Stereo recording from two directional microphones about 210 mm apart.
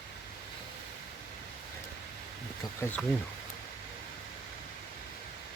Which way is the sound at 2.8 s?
10° left (ahead or behind).